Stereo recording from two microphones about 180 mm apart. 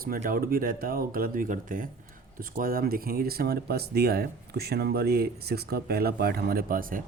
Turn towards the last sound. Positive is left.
turn(degrees=-50)  # may be behind; listen again after turning